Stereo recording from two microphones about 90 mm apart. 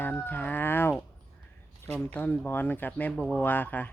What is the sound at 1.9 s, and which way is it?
Speech, 10° left (ahead or behind).